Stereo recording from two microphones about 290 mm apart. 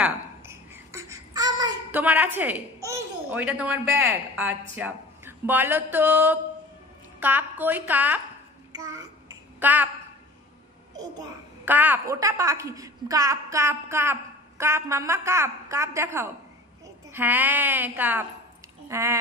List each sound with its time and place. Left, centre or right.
0.0 s a child's voice: centre
8.7 s child singing: centre
11.6 s a woman's voice: centre